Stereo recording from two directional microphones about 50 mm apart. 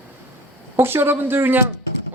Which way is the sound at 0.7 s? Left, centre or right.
Right.